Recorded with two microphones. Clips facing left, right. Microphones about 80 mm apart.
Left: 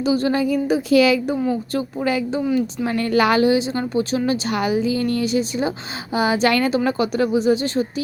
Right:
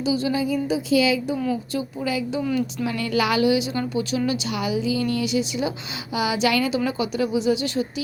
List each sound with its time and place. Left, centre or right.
0.0 s a woman's voice: left
1.7 s a woman's voice: left
2.4 s a woman's voice: left
2.8 s speech: left